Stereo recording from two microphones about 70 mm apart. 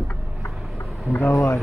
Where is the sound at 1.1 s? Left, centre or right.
Left.